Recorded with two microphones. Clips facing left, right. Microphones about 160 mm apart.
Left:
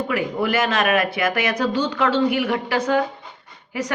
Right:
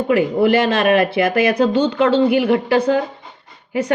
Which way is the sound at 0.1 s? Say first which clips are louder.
Right 10 dB; 30° right (ahead or behind).